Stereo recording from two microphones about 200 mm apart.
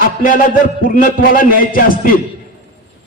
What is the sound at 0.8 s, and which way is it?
A man's voice, 45° left (ahead or behind).